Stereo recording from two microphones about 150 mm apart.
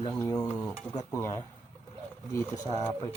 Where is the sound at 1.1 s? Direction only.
20° left (ahead or behind).